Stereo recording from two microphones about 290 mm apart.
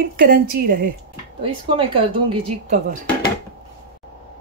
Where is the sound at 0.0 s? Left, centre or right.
Right.